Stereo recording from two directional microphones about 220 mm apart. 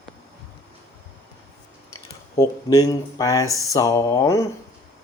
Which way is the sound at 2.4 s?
15° left (ahead or behind).